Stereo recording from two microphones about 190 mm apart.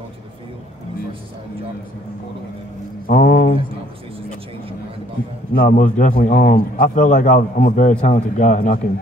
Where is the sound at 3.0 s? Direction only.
45° left (ahead or behind).